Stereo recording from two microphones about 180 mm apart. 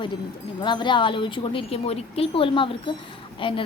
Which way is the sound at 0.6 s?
25° left (ahead or behind).